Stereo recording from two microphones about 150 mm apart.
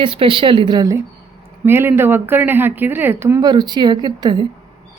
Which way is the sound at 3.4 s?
30° right (ahead or behind).